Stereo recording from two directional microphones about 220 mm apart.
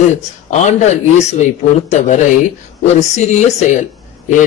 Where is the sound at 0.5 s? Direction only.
30° left (ahead or behind).